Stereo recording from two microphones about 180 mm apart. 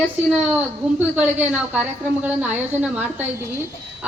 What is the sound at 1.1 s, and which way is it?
A woman's voice, 10° right (ahead or behind).